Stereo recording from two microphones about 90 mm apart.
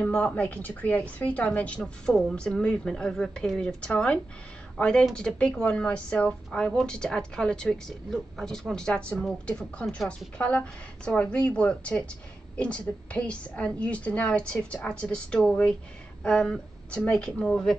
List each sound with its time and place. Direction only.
0.1 s a woman's voice: 15° left (ahead or behind)